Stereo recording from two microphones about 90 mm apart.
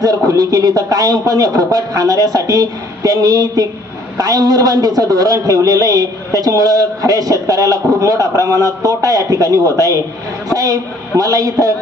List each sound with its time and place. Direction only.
0.0 s a man's voice: 45° right (ahead or behind)